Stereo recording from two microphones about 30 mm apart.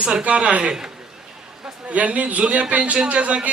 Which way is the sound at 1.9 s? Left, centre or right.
Right.